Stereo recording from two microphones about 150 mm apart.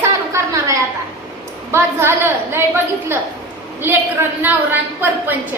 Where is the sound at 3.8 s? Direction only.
15° right (ahead or behind).